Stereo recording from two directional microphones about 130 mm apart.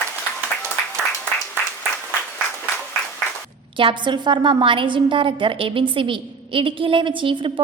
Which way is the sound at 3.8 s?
40° right (ahead or behind).